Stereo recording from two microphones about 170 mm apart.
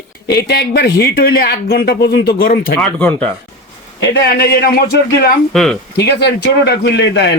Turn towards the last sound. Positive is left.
turn(degrees=85)